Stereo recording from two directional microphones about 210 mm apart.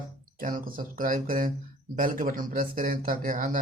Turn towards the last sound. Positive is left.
turn(degrees=-40)  # may be behind; listen again after turning